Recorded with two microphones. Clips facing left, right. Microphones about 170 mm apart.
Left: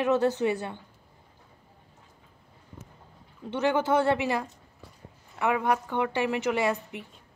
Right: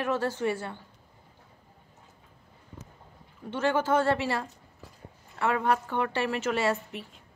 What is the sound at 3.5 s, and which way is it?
A woman's voice, 15° left (ahead or behind).